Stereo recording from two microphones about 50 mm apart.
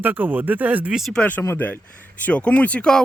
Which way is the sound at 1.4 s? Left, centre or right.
Left.